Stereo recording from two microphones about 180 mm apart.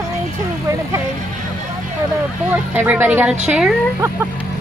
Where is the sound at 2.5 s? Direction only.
10° right (ahead or behind).